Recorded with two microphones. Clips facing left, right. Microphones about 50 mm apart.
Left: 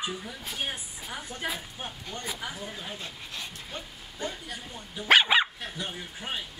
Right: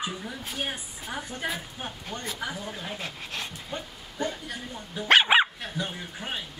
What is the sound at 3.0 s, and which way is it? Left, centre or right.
Dog, right.